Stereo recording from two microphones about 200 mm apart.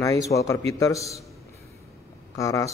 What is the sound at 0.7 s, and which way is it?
Speech, 15° left (ahead or behind).